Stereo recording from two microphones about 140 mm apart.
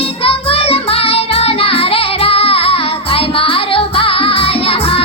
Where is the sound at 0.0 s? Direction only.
40° left (ahead or behind).